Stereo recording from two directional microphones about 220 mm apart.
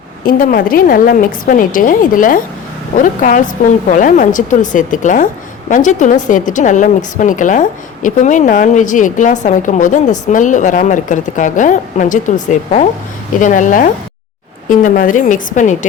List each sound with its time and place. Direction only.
0.3 s a woman's voice: 40° left (ahead or behind)